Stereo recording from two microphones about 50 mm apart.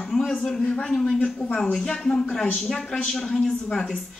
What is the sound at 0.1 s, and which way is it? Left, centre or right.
A man's voice, centre.